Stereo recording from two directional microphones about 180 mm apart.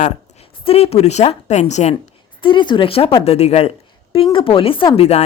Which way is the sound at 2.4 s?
25° left (ahead or behind).